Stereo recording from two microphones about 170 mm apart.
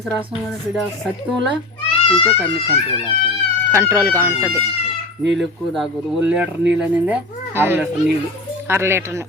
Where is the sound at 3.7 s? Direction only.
15° right (ahead or behind).